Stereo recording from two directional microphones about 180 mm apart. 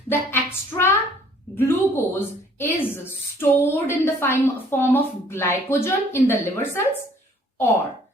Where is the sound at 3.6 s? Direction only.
15° left (ahead or behind).